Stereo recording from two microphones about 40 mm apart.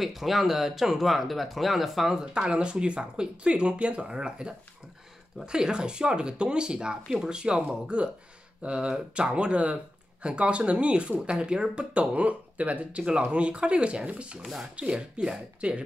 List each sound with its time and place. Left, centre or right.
0.0 s speech: centre
2.3 s speech: right
4.1 s speech: centre
14.4 s speech: centre
14.8 s speech: right